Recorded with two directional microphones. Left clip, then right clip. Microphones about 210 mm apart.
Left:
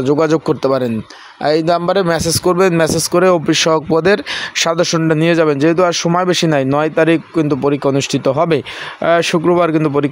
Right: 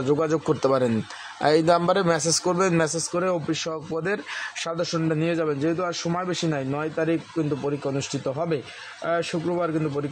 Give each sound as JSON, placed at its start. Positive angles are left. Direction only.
{"t": 0.0, "sound": "a man's voice", "side_deg": 35}